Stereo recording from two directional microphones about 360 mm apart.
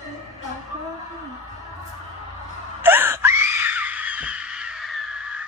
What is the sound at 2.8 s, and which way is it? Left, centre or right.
Screaming, centre.